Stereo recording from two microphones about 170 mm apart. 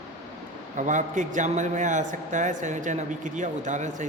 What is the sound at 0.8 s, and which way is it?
A man's voice, 45° right (ahead or behind).